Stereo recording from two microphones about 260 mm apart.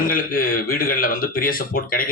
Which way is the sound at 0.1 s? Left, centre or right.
Left.